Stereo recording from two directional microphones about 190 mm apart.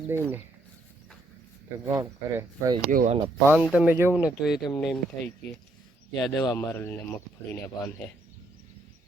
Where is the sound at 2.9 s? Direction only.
45° right (ahead or behind).